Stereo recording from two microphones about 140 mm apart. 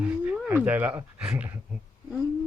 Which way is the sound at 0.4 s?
10° right (ahead or behind).